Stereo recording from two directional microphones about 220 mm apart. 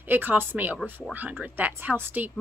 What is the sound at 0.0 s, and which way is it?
Speech, 10° right (ahead or behind).